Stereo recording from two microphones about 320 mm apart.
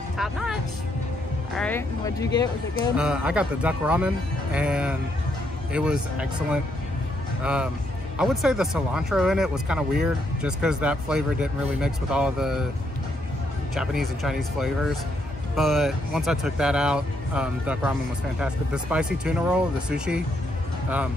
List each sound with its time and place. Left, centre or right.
0.2 s speech: centre
3.0 s speech: centre
13.7 s speech: centre